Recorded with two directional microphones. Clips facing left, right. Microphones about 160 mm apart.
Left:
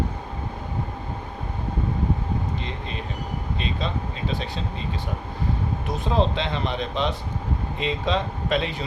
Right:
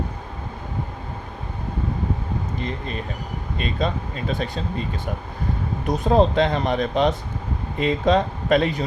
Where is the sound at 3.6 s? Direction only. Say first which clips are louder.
Right 5 dB; 45° right (ahead or behind).